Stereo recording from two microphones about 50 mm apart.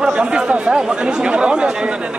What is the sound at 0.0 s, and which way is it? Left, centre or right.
Speech, centre.